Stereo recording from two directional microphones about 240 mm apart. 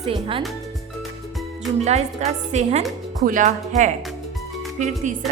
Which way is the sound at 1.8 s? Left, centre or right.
Right.